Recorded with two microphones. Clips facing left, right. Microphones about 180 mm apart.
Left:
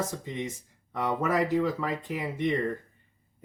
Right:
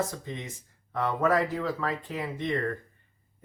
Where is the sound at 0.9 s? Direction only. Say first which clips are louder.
Right 2 dB; 15° left (ahead or behind).